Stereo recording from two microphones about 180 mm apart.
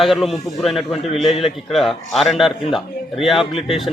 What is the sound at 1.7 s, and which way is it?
Speech, centre (ahead or behind).